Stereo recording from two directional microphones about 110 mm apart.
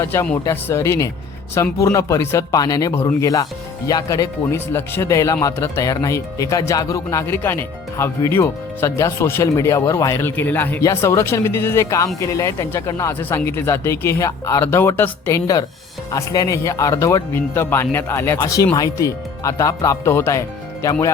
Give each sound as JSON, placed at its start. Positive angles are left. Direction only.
{"t": 0.0, "sound": "speech", "side_deg": 25}
{"t": 2.9, "sound": "speech", "side_deg": 25}
{"t": 4.5, "sound": "speech", "side_deg": 25}
{"t": 10.8, "sound": "speech", "side_deg": 30}
{"t": 16.1, "sound": "speech", "side_deg": 30}